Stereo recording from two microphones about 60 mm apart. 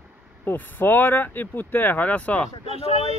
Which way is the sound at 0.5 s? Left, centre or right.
Left.